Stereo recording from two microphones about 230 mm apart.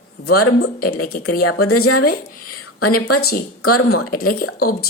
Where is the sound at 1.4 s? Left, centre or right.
Left.